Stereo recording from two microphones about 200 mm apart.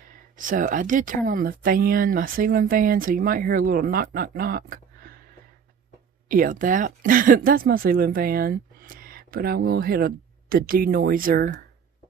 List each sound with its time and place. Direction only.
0.1 s speech: 40° right (ahead or behind)
6.2 s speech: 45° right (ahead or behind)